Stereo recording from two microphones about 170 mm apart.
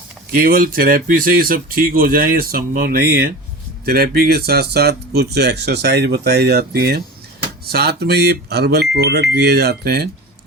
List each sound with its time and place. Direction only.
0.3 s speech: 55° right (ahead or behind)